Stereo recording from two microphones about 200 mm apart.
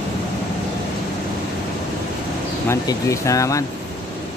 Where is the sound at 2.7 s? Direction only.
15° left (ahead or behind).